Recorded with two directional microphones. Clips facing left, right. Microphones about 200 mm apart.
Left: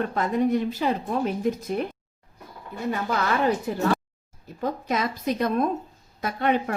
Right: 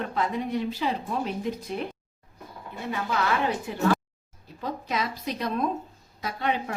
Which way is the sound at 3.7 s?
40° left (ahead or behind).